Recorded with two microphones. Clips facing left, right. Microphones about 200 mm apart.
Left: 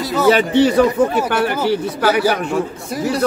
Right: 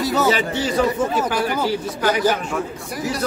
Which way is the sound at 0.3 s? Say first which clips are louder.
Left 8 dB; 65° left (ahead or behind).